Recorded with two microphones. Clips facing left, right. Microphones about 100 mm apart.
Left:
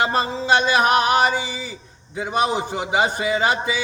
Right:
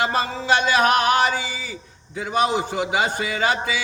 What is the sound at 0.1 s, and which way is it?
Music, 20° left (ahead or behind).